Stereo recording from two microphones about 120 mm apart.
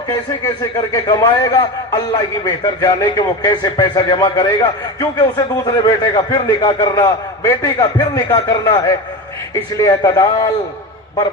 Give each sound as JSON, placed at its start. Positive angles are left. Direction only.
{"t": 0.4, "sound": "a man's voice", "side_deg": 30}